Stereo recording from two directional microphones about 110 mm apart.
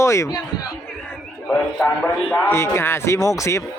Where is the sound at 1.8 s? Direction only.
15° left (ahead or behind).